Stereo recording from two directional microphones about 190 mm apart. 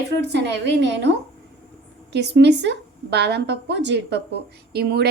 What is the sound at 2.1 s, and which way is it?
A woman's voice, 60° right (ahead or behind).